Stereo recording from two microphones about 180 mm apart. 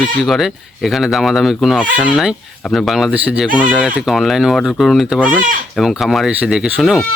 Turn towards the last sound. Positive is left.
turn(degrees=0)  # may be behind; listen again after turning